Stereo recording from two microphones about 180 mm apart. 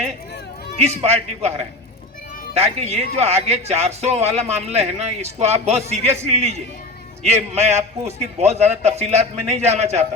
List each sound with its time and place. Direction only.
0.9 s speech: 35° right (ahead or behind)
2.6 s speech: 35° right (ahead or behind)